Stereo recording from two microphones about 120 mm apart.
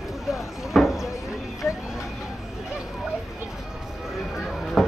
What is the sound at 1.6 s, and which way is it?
Vehicle, 20° left (ahead or behind).